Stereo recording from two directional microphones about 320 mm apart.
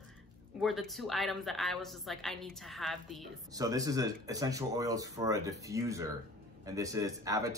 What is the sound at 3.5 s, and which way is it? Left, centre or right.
Speech, centre.